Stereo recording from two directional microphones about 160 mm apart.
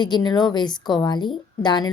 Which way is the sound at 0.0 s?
25° left (ahead or behind).